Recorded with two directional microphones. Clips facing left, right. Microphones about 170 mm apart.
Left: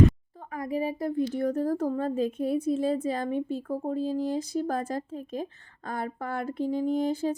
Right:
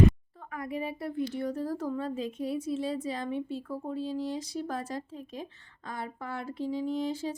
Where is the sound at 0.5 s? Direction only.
40° left (ahead or behind).